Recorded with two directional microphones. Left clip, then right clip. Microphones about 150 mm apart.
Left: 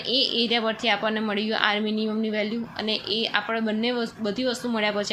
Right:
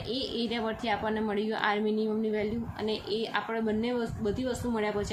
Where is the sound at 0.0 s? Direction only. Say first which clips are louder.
Left 10 dB; 25° left (ahead or behind).